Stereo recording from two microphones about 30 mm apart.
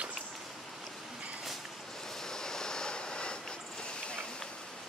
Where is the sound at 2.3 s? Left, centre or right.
Left.